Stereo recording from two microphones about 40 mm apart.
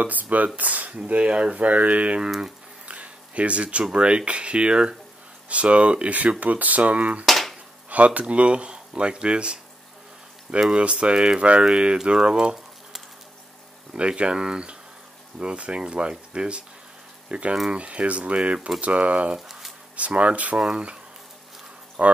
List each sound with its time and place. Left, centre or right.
0.0 s speech: right
2.9 s a sound: right
3.9 s speech: right
7.2 s hammer: centre
7.9 s speech: right
10.8 s speech: right
13.9 s speech: right
19.3 s a sound: centre
20.2 s speech: right
20.7 s speech: right